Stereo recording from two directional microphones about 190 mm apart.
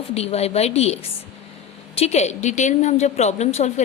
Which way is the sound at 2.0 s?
35° left (ahead or behind).